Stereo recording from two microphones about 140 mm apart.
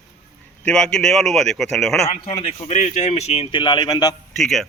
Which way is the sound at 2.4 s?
50° left (ahead or behind).